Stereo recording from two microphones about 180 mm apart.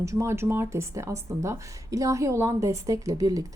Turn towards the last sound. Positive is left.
turn(degrees=-20)  # may be behind; listen again after turning